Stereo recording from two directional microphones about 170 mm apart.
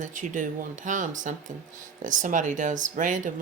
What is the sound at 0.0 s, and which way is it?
Speech, 50° right (ahead or behind).